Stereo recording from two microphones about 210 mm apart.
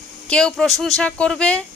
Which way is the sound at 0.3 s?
5° left (ahead or behind).